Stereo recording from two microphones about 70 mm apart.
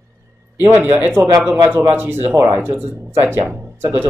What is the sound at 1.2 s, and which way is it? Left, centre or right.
Speech, right.